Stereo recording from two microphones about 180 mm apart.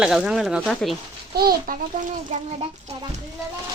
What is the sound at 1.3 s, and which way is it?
A child's voice, 55° right (ahead or behind).